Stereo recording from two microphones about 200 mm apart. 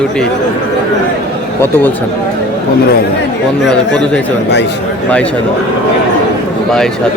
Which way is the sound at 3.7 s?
5° left (ahead or behind).